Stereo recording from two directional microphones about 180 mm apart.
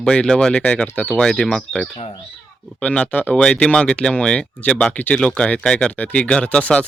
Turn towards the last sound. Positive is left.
turn(degrees=5)  # may be behind; listen again after turning